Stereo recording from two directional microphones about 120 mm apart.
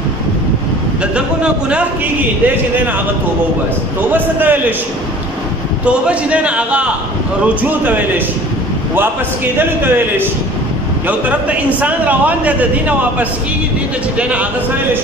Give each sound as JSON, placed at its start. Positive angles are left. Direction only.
{"t": 1.1, "sound": "a man's voice", "side_deg": -10}
{"t": 4.1, "sound": "a man's voice", "side_deg": -15}
{"t": 5.9, "sound": "a man's voice", "side_deg": -10}
{"t": 9.6, "sound": "a man's voice", "side_deg": -15}